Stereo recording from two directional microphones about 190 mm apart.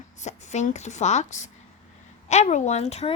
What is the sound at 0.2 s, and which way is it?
A woman's voice, 40° left (ahead or behind).